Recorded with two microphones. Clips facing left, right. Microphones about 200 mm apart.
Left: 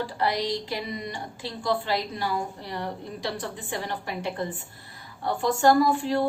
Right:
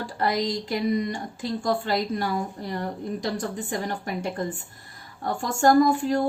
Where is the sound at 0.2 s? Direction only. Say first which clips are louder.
Right 3 dB; 45° right (ahead or behind).